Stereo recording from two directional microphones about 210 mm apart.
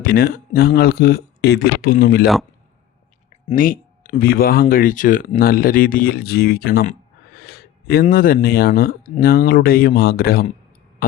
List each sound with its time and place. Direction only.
0.0 s speech: 45° left (ahead or behind)
3.5 s speech: 40° left (ahead or behind)
7.4 s a sound: 45° left (ahead or behind)
8.0 s speech: 40° left (ahead or behind)